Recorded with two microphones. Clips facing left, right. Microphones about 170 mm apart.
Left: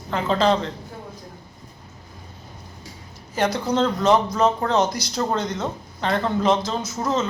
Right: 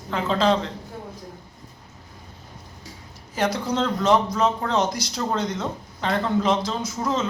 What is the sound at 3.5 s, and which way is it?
Speech, 30° left (ahead or behind).